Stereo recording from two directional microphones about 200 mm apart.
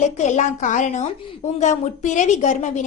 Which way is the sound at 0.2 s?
35° left (ahead or behind).